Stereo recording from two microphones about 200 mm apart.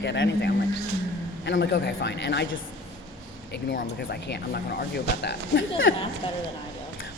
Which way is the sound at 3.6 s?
55° left (ahead or behind).